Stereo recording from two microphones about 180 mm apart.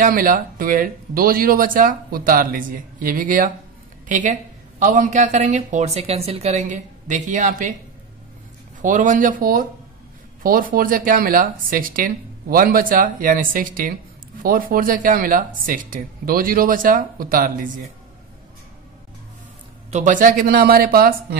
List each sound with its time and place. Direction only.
0.0 s a woman's voice: 50° right (ahead or behind)
8.8 s a woman's voice: 45° right (ahead or behind)
19.9 s speech: 45° right (ahead or behind)